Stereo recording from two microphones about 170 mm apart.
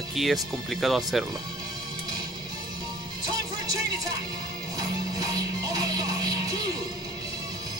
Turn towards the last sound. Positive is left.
turn(degrees=-20)  # may be behind; listen again after turning